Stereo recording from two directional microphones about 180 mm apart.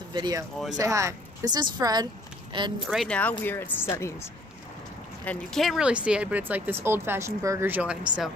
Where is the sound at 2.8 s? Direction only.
Centre (ahead or behind).